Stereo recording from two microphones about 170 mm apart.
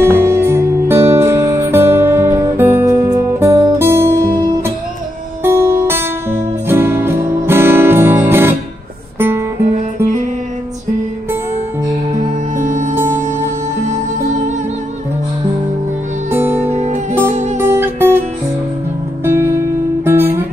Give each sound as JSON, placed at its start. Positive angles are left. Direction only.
{"t": 0.0, "sound": "music", "side_deg": -15}
{"t": 12.5, "sound": "music", "side_deg": -45}
{"t": 16.3, "sound": "music", "side_deg": -10}
{"t": 16.6, "sound": "music", "side_deg": -40}
{"t": 17.1, "sound": "music", "side_deg": -15}
{"t": 19.2, "sound": "music", "side_deg": -15}